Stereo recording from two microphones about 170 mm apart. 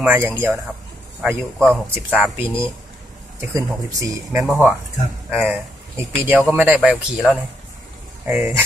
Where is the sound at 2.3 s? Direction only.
10° right (ahead or behind).